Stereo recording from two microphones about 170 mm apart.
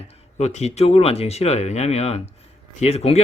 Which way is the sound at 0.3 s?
40° left (ahead or behind).